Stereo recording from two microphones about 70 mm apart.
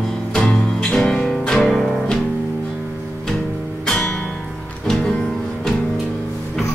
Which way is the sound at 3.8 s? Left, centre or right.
Centre.